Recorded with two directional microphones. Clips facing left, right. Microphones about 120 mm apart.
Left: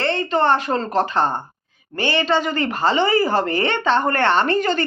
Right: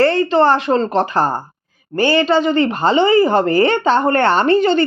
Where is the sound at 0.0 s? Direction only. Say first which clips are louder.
Right 6 dB; 35° right (ahead or behind).